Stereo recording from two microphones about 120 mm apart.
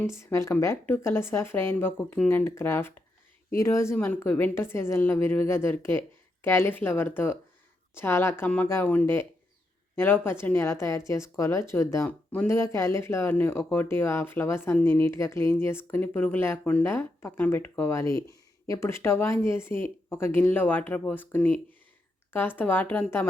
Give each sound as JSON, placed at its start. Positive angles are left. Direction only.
{"t": 0.0, "sound": "speech", "side_deg": 20}
{"t": 3.9, "sound": "speech", "side_deg": 15}